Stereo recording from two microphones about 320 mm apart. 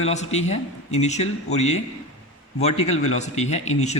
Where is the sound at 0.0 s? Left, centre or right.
Centre.